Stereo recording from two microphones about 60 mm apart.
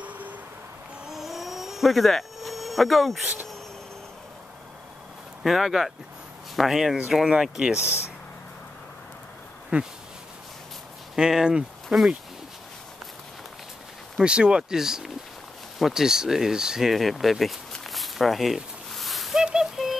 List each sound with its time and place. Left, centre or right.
1.0 s a sound: centre
5.4 s speech: centre
9.7 s speech: centre
11.1 s speech: centre
14.2 s speech: centre
16.9 s speech: centre
17.9 s a sound: centre